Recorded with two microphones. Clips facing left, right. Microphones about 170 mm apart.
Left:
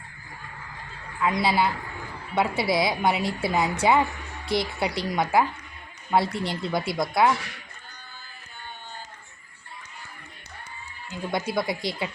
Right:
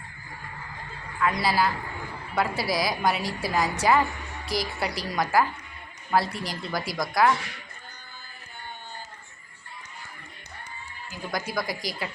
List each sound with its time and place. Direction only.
1.2 s a woman's voice: 20° left (ahead or behind)
11.1 s a woman's voice: 25° left (ahead or behind)